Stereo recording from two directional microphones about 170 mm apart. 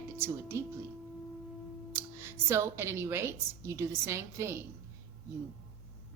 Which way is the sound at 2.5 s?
15° right (ahead or behind).